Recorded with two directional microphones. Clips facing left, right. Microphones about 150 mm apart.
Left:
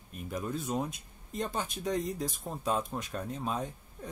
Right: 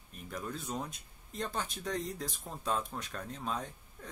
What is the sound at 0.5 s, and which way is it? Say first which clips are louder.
Speech: left 6 dB; 10° left (ahead or behind).